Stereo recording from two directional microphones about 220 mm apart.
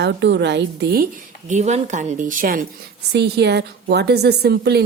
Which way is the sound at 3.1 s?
50° right (ahead or behind).